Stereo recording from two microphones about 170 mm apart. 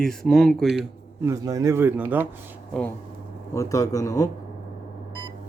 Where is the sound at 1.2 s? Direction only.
20° right (ahead or behind).